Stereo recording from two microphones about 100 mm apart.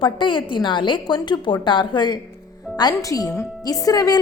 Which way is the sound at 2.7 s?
40° left (ahead or behind).